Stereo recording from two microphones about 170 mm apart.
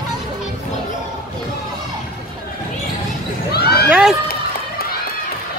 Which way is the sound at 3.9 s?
5° right (ahead or behind).